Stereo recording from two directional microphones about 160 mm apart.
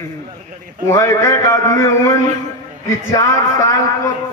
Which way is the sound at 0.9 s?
20° left (ahead or behind).